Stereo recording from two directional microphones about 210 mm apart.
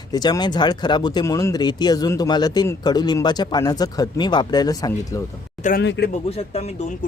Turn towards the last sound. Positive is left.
turn(degrees=60)  # may be behind; listen again after turning